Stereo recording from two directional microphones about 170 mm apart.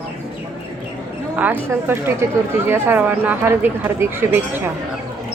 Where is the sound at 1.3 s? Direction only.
10° right (ahead or behind).